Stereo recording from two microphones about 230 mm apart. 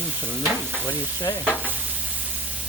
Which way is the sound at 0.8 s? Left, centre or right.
Centre.